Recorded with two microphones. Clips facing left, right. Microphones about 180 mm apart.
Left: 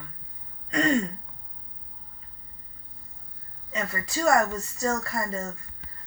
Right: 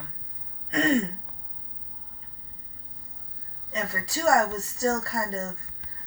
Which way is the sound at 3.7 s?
35° right (ahead or behind).